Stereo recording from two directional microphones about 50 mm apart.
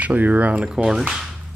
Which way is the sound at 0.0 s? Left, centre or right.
Right.